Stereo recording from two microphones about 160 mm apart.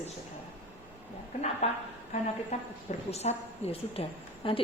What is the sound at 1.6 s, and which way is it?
A woman's voice, 40° left (ahead or behind).